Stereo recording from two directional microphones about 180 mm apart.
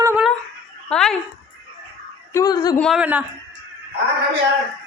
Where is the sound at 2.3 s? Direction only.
20° left (ahead or behind).